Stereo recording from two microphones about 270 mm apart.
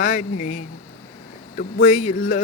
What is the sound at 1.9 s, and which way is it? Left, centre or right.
Speech, left.